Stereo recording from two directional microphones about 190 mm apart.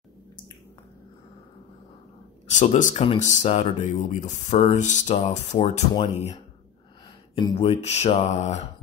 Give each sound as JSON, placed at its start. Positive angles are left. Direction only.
{"t": 2.4, "sound": "speech", "side_deg": 35}
{"t": 7.3, "sound": "speech", "side_deg": 25}